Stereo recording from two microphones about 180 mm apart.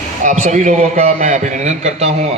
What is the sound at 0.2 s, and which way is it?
A man's voice, 45° right (ahead or behind).